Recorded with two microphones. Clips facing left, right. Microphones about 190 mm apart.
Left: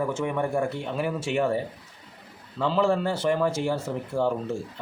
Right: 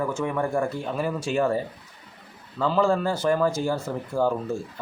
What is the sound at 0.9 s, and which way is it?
Speech, 10° left (ahead or behind).